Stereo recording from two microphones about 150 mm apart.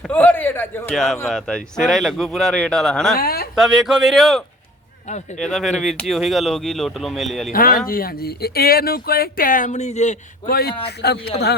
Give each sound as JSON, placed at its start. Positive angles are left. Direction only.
{"t": 0.1, "sound": "a sound", "side_deg": 10}
{"t": 0.9, "sound": "speech", "side_deg": 0}
{"t": 3.2, "sound": "speech", "side_deg": 85}
{"t": 3.5, "sound": "speech", "side_deg": -5}
{"t": 7.5, "sound": "speech", "side_deg": 70}
{"t": 10.5, "sound": "speech", "side_deg": 90}